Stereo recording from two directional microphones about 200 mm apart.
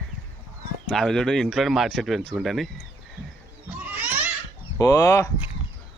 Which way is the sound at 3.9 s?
10° right (ahead or behind).